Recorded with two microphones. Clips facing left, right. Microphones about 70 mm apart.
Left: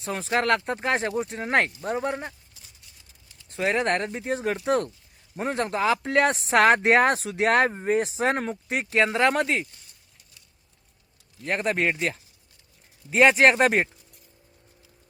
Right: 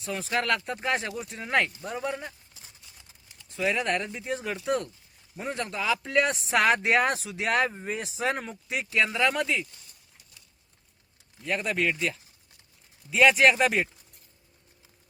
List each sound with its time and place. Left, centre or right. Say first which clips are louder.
0.0 s speech: left 4 dB; left
3.6 s speech: left 3 dB; left
11.4 s speech: left 3 dB; left